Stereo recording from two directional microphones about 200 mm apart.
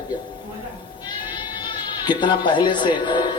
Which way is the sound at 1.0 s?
20° left (ahead or behind).